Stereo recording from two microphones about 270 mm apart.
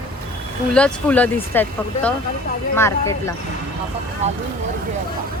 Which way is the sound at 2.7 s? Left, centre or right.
Centre.